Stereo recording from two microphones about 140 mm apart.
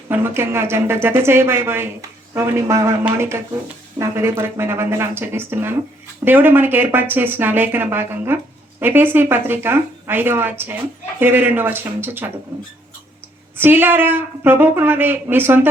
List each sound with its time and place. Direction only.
0.1 s speech: 15° right (ahead or behind)
13.6 s speech: 15° right (ahead or behind)